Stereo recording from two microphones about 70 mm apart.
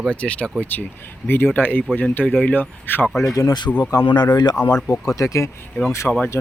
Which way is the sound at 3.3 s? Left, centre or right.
Left.